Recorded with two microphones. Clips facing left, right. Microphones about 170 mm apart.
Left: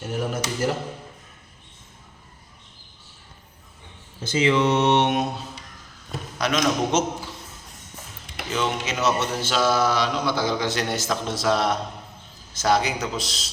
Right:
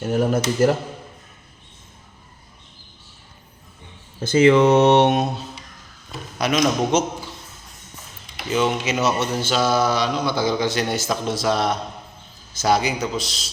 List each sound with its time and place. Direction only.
0.0 s speech: 45° right (ahead or behind)
4.2 s speech: 50° right (ahead or behind)
6.4 s a man's voice: 10° right (ahead or behind)
8.4 s a man's voice: 10° right (ahead or behind)